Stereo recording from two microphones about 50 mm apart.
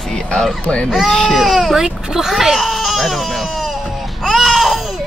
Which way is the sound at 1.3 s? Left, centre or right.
Centre.